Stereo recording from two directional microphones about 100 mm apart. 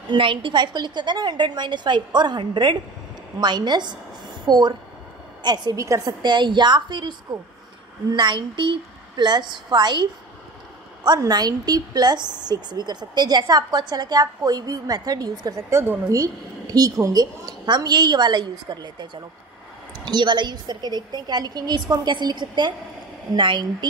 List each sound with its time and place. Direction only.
0.1 s a woman's voice: 60° right (ahead or behind); by 6.1 s 35° right (ahead or behind)
6.2 s a woman's voice: 50° right (ahead or behind)
11.1 s a woman's voice: 45° right (ahead or behind)
15.7 s speech: 20° right (ahead or behind)
16.1 s a woman's voice: 35° right (ahead or behind)